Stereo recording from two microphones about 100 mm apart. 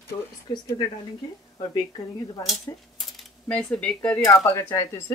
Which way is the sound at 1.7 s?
45° left (ahead or behind).